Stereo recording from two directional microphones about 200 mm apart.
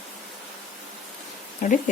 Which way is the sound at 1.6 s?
40° left (ahead or behind).